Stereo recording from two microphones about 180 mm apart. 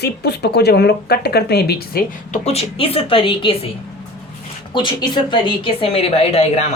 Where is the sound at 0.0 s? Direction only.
65° left (ahead or behind).